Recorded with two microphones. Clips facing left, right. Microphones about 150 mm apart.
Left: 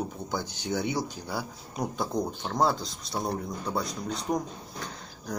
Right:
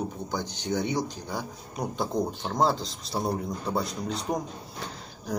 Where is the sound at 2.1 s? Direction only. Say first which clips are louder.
Right 1 dB; 25° right (ahead or behind).